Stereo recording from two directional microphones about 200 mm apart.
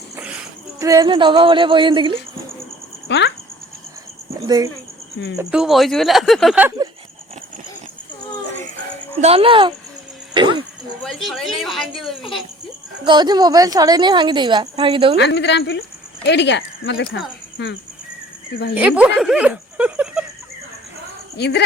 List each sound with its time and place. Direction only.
0.2 s a sound: 5° right (ahead or behind)
0.8 s a woman's voice: 15° right (ahead or behind)
3.1 s speech: 60° left (ahead or behind)
4.4 s a woman's voice: 20° right (ahead or behind)
5.4 s speech: 5° right (ahead or behind)
9.2 s a woman's voice: 30° right (ahead or behind)
11.0 s speech: centre (ahead or behind)
13.1 s a woman's voice: 20° right (ahead or behind)
15.2 s speech: 60° left (ahead or behind)
18.7 s speech: 5° right (ahead or behind)
21.3 s speech: 55° left (ahead or behind)